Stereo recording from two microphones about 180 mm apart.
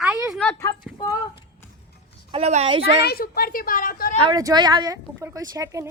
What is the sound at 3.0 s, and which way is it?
A woman's voice, 60° left (ahead or behind).